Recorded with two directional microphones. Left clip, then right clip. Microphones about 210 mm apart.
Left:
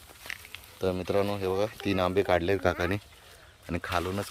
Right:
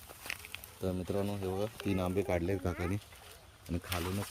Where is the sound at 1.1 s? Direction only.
10° left (ahead or behind).